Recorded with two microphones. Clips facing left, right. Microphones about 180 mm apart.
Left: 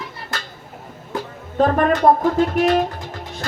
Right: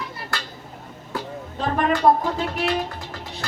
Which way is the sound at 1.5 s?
50° left (ahead or behind).